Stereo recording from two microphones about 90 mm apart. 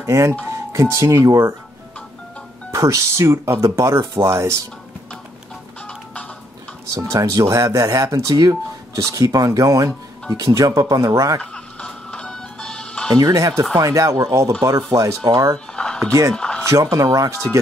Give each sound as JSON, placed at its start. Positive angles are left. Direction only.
{"t": 0.0, "sound": "speech", "side_deg": -30}
{"t": 2.7, "sound": "speech", "side_deg": -35}
{"t": 6.9, "sound": "speech", "side_deg": -40}
{"t": 11.5, "sound": "music", "side_deg": 10}
{"t": 13.1, "sound": "speech", "side_deg": -40}
{"t": 15.2, "sound": "speech", "side_deg": -50}
{"t": 15.5, "sound": "music", "side_deg": 10}
{"t": 16.1, "sound": "speech", "side_deg": -40}
{"t": 16.3, "sound": "a sound", "side_deg": 10}
{"t": 16.6, "sound": "speech", "side_deg": -40}